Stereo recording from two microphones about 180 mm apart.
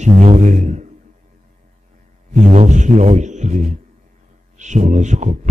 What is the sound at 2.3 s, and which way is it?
A man's voice, 40° right (ahead or behind).